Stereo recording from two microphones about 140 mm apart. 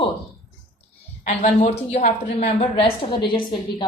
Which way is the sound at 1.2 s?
50° left (ahead or behind).